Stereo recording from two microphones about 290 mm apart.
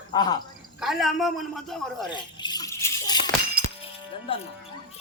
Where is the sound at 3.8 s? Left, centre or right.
Centre.